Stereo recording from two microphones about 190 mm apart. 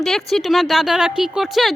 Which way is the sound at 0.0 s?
Centre (ahead or behind).